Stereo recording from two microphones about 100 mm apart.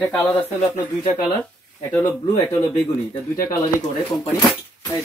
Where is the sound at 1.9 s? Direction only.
25° left (ahead or behind).